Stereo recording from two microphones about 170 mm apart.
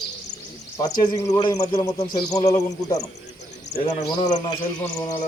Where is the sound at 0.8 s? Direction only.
25° left (ahead or behind).